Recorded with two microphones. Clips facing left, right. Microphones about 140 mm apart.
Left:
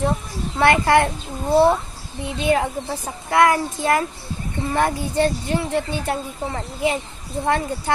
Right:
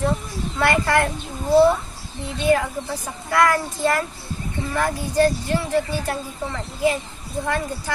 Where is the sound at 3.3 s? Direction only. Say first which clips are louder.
Left 2 dB; 20° left (ahead or behind).